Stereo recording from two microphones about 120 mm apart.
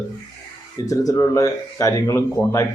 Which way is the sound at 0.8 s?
30° left (ahead or behind).